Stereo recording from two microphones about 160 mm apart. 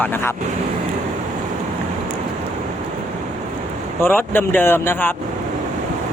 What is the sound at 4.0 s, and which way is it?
Speech, 15° left (ahead or behind).